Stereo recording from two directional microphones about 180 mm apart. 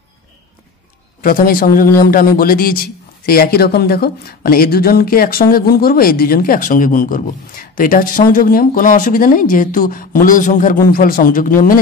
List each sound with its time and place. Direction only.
1.2 s a man's voice: 55° left (ahead or behind)